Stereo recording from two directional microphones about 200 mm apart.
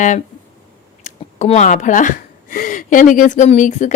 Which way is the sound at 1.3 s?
35° left (ahead or behind).